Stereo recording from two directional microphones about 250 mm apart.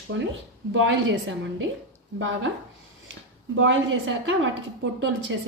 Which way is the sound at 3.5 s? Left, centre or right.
Right.